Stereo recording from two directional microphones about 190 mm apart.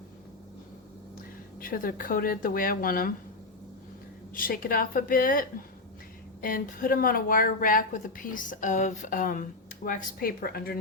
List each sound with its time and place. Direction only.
1.5 s a woman's voice: 50° left (ahead or behind)
4.4 s a woman's voice: 50° left (ahead or behind)